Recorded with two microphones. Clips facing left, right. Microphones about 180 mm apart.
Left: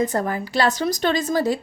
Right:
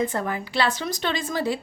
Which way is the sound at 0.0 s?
40° left (ahead or behind).